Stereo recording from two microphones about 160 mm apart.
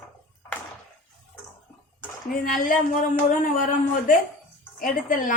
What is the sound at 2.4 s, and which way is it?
A woman's voice, 60° left (ahead or behind).